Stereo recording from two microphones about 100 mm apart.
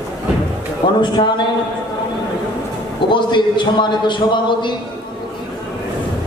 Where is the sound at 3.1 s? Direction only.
50° left (ahead or behind).